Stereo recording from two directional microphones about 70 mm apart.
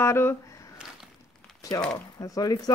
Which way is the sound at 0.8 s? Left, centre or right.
Centre.